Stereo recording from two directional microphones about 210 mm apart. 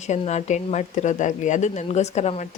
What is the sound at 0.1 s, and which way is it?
Speech, 35° left (ahead or behind).